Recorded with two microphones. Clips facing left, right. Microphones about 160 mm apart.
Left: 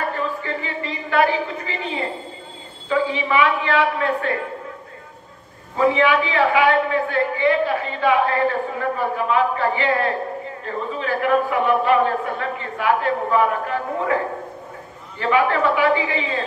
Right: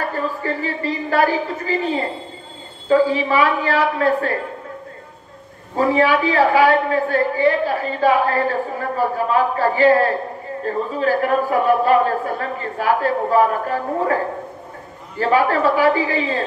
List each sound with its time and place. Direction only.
0.4 s a man's voice: 40° right (ahead or behind)
5.8 s a man's voice: 40° right (ahead or behind)